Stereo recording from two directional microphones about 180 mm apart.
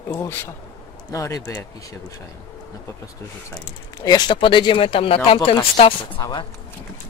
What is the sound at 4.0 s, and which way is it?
Speech, 25° left (ahead or behind).